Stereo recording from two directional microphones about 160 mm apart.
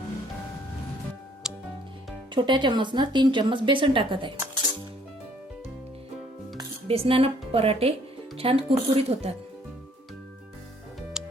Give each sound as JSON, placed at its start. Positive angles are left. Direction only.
{"t": 1.5, "sound": "music", "side_deg": -5}
{"t": 2.3, "sound": "speech", "side_deg": -30}
{"t": 6.8, "sound": "a woman's voice", "side_deg": -35}
{"t": 11.2, "sound": "music", "side_deg": -5}